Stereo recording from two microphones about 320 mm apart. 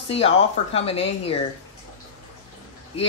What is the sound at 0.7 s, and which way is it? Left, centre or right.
Speech, centre.